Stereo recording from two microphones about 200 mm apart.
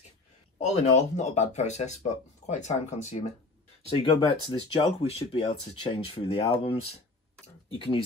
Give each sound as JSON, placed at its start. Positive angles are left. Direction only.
{"t": 0.6, "sound": "speech", "side_deg": 30}
{"t": 7.4, "sound": "tick-tock", "side_deg": 30}